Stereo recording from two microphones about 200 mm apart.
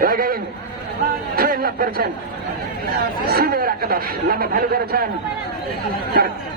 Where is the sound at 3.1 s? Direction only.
50° right (ahead or behind).